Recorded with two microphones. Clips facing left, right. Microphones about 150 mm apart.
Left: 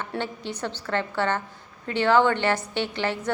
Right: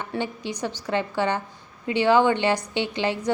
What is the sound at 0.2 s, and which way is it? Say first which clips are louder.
A woman's voice: right 3 dB; 15° right (ahead or behind).